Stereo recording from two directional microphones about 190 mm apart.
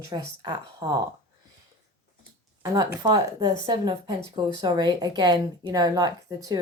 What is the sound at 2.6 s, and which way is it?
Speech, 20° right (ahead or behind).